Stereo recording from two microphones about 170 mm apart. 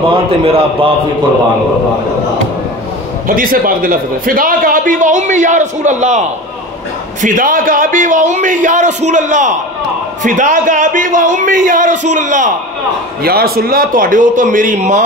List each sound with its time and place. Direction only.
0.1 s a man's voice: 30° right (ahead or behind)
3.3 s a man's voice: 55° right (ahead or behind)
13.2 s a man's voice: 65° right (ahead or behind); by 15.0 s 45° right (ahead or behind)